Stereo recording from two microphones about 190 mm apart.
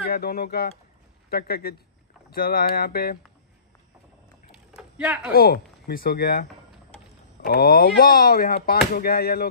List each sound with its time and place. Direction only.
0.0 s speech: 55° left (ahead or behind)
4.7 s a sound: 5° right (ahead or behind)
5.3 s speech: 55° left (ahead or behind)
7.4 s speech: 55° left (ahead or behind)